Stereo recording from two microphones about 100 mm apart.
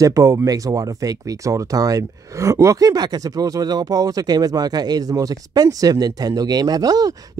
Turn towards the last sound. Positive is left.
turn(degrees=-40)  # may be behind; listen again after turning